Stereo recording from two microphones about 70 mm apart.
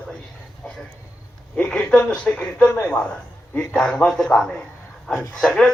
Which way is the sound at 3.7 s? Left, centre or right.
Centre.